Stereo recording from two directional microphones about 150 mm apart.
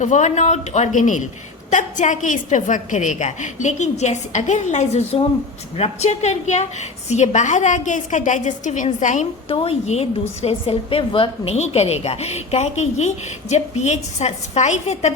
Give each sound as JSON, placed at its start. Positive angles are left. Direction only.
{"t": 0.0, "sound": "a woman's voice", "side_deg": 50}
{"t": 9.5, "sound": "a woman's voice", "side_deg": 40}